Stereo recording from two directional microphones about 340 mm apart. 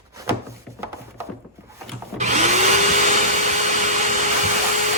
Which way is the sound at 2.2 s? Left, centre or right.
Right.